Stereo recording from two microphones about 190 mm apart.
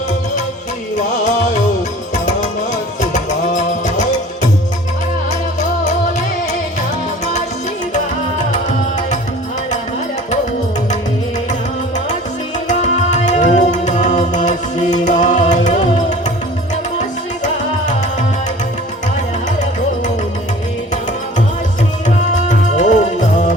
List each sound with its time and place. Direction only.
3.0 s music: 40° left (ahead or behind)
7.9 s music: 40° left (ahead or behind)
12.6 s music: 40° left (ahead or behind)
22.2 s music: 40° left (ahead or behind)